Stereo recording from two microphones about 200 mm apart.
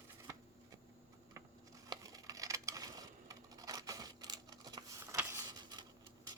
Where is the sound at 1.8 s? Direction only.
20° right (ahead or behind).